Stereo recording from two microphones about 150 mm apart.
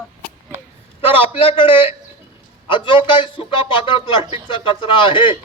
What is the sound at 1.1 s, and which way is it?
A man's voice, 35° left (ahead or behind).